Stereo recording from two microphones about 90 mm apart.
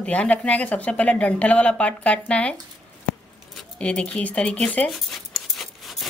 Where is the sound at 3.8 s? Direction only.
10° left (ahead or behind).